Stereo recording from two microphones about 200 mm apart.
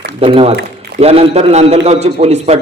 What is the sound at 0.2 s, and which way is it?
Speech, 30° right (ahead or behind).